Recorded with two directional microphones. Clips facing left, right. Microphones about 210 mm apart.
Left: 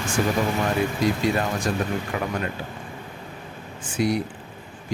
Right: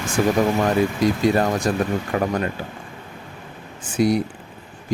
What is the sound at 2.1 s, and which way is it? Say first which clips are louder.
Speech: right 8 dB; 40° right (ahead or behind).